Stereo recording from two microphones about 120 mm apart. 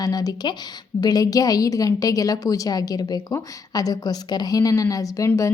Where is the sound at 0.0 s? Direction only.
30° left (ahead or behind).